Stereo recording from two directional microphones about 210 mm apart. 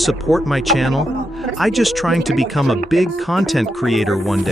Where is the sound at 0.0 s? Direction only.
Centre (ahead or behind).